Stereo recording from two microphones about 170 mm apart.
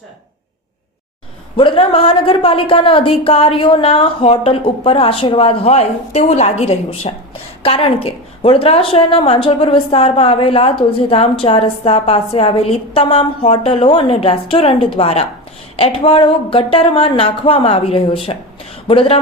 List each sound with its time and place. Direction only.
1.5 s a woman's voice: 35° left (ahead or behind)